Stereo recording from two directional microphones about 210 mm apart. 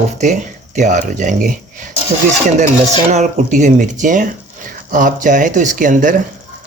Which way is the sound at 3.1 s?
35° right (ahead or behind).